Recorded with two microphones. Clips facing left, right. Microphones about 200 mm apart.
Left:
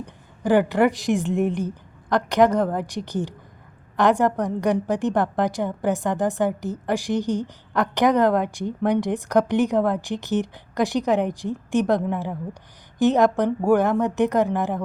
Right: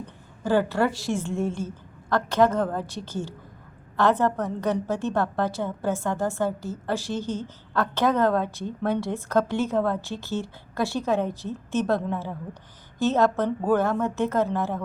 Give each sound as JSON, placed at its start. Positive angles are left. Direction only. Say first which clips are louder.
{"t": 0.0, "sound": "a woman's voice", "louder": "left 4 dB", "side_deg": 15}